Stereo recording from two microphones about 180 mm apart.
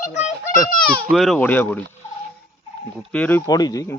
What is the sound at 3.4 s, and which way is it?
Speech, 20° left (ahead or behind).